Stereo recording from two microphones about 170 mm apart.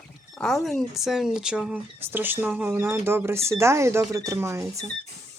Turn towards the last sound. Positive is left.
turn(degrees=-15)  # may be behind; listen again after turning